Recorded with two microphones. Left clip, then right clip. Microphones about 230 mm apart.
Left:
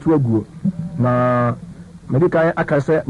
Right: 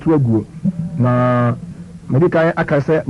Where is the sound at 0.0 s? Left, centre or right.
Left.